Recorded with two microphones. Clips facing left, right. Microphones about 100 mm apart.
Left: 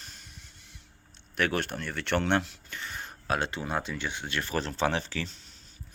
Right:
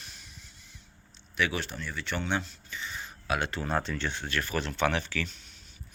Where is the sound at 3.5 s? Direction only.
15° left (ahead or behind).